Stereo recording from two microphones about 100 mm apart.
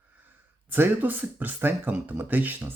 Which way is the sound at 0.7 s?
20° right (ahead or behind).